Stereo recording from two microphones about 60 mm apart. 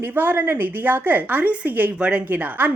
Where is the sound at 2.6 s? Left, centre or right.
Right.